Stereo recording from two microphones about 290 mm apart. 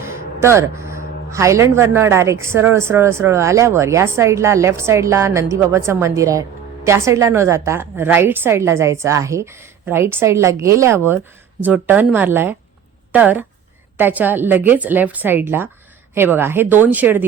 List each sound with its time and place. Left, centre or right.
0.0 s speech: centre